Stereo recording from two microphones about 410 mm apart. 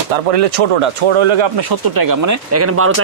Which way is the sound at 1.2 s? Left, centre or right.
Right.